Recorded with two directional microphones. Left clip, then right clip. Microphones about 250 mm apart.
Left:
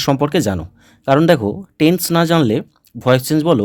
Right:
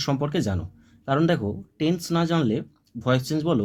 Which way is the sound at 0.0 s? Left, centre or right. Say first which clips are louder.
Left 10 dB; left.